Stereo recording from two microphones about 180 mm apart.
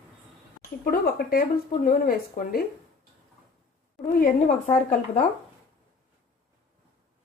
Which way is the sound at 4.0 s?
45° left (ahead or behind).